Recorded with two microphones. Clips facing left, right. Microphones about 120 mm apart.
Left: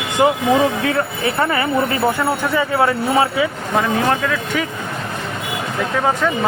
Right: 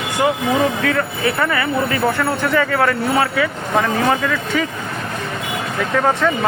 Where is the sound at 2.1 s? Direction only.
15° left (ahead or behind).